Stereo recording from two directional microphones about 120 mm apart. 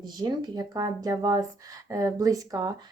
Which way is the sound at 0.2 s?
35° right (ahead or behind).